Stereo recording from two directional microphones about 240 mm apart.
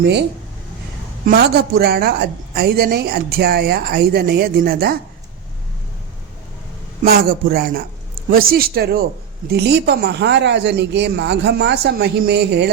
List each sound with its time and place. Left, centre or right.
1.3 s a woman's voice: right
7.0 s a woman's voice: right